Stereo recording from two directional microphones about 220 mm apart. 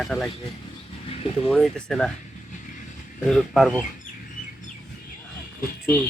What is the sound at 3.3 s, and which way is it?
Speech, centre (ahead or behind).